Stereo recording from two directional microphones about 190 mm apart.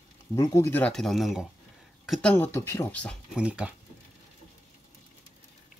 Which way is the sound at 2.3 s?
10° left (ahead or behind).